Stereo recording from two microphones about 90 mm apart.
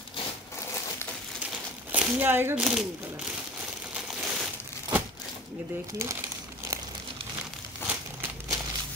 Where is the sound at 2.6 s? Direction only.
5° right (ahead or behind).